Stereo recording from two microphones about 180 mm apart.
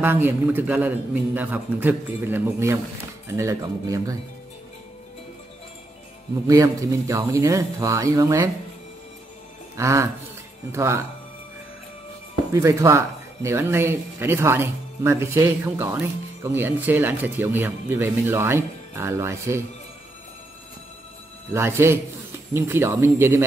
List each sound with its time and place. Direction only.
0.0 s speech: 10° right (ahead or behind)
6.4 s speech: 20° right (ahead or behind)
9.8 s speech: 15° right (ahead or behind)
12.5 s speech: 15° right (ahead or behind)
21.5 s speech: 15° right (ahead or behind)